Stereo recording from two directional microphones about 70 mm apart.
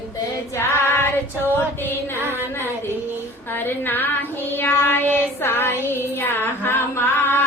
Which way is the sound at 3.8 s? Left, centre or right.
Left.